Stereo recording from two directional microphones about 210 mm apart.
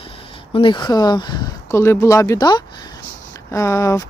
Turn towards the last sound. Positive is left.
turn(degrees=15)  # may be behind; listen again after turning